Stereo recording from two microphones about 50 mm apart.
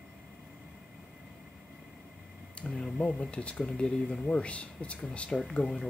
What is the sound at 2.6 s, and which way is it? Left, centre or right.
Speech, left.